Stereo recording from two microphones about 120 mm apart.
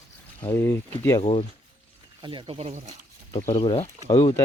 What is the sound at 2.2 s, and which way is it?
Speech, 45° right (ahead or behind).